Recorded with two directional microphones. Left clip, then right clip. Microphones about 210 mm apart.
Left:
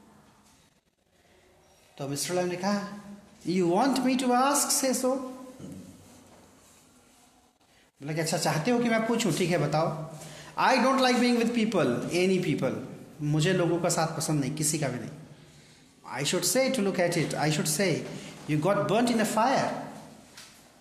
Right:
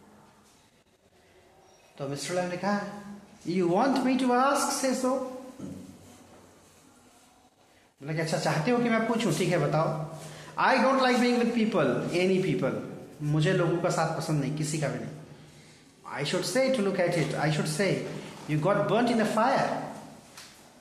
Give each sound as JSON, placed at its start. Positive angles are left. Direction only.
{"t": 2.0, "sound": "a man's voice", "side_deg": 45}
{"t": 8.0, "sound": "a man's voice", "side_deg": 45}
{"t": 16.1, "sound": "a man's voice", "side_deg": 45}